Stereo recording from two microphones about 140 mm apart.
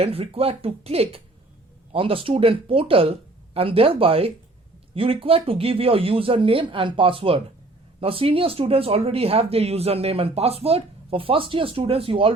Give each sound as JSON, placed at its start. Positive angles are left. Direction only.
{"t": 0.0, "sound": "speech", "side_deg": -45}